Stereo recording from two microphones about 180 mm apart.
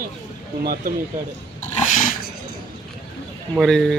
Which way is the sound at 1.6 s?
45° left (ahead or behind).